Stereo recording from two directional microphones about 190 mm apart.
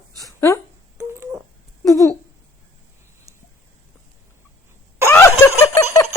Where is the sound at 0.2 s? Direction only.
15° left (ahead or behind).